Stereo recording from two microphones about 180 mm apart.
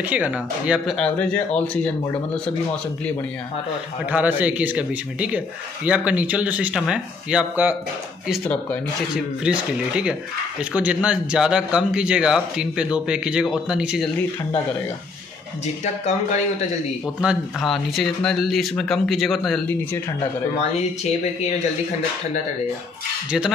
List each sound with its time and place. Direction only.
0.1 s speech: 5° right (ahead or behind)
0.9 s speech: 5° left (ahead or behind)
4.1 s speech: 10° right (ahead or behind)
8.3 s speech: 5° left (ahead or behind)
9.1 s speech: 5° right (ahead or behind)
17.2 s speech: centre (ahead or behind)
20.5 s speech: 35° left (ahead or behind)